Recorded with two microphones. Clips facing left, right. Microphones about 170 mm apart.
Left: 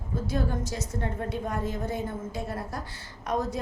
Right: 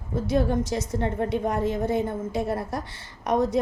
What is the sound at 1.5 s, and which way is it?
Speech, 80° right.